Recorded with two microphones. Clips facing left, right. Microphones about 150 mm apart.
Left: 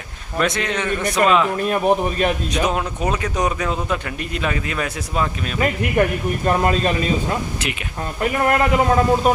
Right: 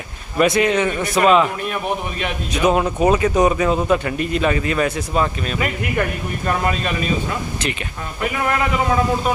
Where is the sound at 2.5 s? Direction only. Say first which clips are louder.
Right 4 dB; 10° right (ahead or behind).